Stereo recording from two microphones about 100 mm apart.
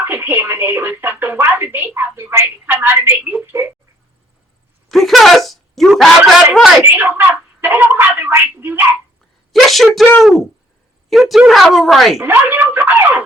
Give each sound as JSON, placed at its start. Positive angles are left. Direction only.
{"t": 0.0, "sound": "speech", "side_deg": -20}
{"t": 4.9, "sound": "speech", "side_deg": 0}
{"t": 6.8, "sound": "speech", "side_deg": -20}
{"t": 9.5, "sound": "speech", "side_deg": 0}
{"t": 12.2, "sound": "speech", "side_deg": -20}